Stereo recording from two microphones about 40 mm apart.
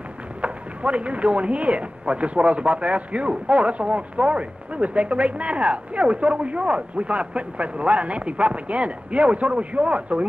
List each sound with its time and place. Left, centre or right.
0.4 s speech: right